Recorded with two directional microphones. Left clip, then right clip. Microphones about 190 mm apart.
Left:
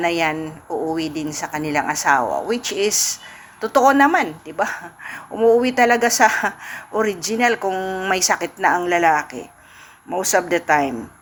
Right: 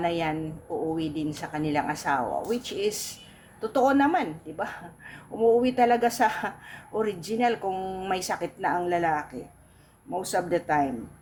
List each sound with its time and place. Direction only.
0.0 s a woman's voice: 5° left (ahead or behind)